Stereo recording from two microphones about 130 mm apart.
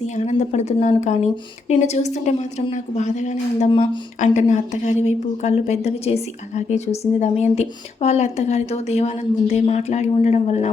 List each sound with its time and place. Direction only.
0.3 s a woman's voice: 60° left (ahead or behind)